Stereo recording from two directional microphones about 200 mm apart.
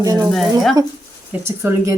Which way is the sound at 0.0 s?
20° right (ahead or behind).